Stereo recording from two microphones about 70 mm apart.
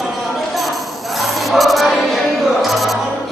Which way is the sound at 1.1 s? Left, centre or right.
Centre.